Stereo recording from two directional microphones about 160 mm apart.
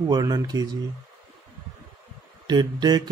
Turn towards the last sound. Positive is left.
turn(degrees=-25)  # may be behind; listen again after turning